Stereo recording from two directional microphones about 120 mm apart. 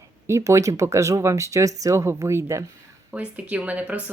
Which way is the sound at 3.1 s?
10° right (ahead or behind).